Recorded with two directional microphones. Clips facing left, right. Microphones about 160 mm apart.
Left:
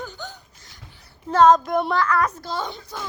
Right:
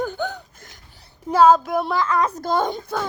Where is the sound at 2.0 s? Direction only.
20° right (ahead or behind).